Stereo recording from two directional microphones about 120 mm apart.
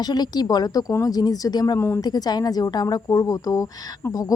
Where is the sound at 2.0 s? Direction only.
35° left (ahead or behind).